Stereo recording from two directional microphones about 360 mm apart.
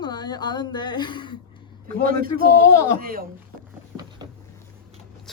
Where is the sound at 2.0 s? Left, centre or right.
Right.